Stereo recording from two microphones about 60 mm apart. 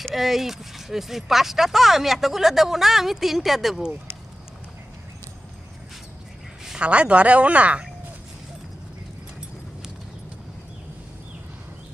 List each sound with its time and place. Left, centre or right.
0.1 s speech: centre
6.8 s speech: right